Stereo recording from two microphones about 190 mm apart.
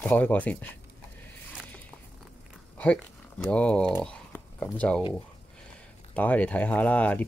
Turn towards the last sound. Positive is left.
turn(degrees=5)  # may be behind; listen again after turning